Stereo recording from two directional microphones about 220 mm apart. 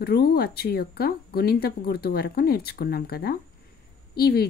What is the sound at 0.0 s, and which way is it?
Speech, 45° left (ahead or behind).